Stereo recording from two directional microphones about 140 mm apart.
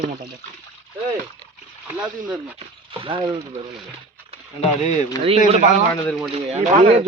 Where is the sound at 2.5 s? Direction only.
40° right (ahead or behind).